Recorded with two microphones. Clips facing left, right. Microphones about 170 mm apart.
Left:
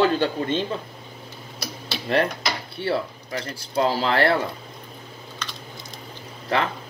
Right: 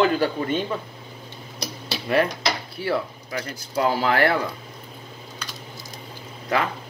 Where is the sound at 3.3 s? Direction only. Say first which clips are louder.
Left 1 dB; 30° left (ahead or behind).